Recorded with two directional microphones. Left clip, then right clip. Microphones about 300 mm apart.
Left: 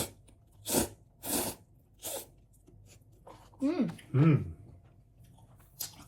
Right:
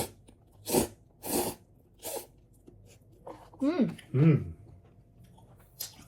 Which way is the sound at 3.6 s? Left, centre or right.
Right.